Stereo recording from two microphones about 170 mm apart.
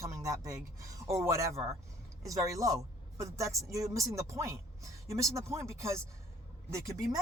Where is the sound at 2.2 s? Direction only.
20° right (ahead or behind).